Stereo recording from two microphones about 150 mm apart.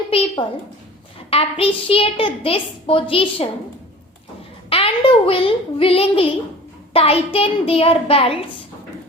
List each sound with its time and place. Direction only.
0.1 s a sound: 40° left (ahead or behind)
1.3 s a woman's voice: 40° left (ahead or behind)
4.7 s a woman's voice: 40° left (ahead or behind)